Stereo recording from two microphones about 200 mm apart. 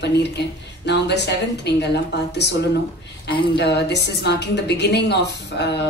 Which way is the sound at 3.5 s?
55° left (ahead or behind).